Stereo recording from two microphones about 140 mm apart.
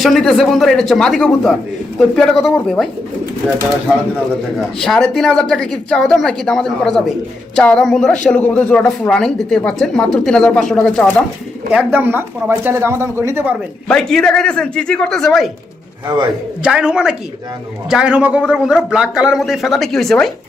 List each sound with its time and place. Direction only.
0.0 s a woman's voice: 5° left (ahead or behind)
4.8 s a woman's voice: 5° left (ahead or behind)
11.7 s speech: 10° right (ahead or behind)
13.8 s a woman's voice: 5° left (ahead or behind)
16.6 s a woman's voice: 5° right (ahead or behind)